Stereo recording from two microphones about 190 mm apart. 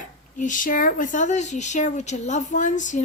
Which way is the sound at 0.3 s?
40° left (ahead or behind).